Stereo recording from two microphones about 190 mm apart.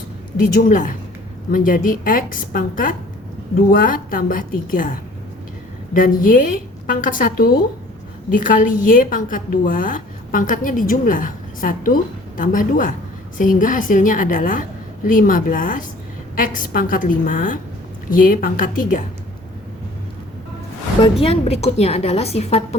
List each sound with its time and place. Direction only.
0.5 s a woman's voice: 45° left (ahead or behind)
5.9 s a woman's voice: 45° left (ahead or behind)
21.0 s a woman's voice: 30° left (ahead or behind)